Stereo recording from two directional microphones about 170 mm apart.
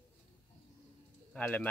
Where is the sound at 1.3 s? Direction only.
10° left (ahead or behind).